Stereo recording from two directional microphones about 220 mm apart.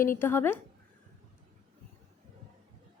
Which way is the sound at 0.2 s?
10° left (ahead or behind).